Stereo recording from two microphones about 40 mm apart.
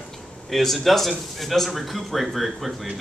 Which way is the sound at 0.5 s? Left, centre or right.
Centre.